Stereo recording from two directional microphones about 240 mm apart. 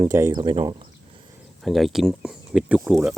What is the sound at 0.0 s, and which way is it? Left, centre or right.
Speech, centre.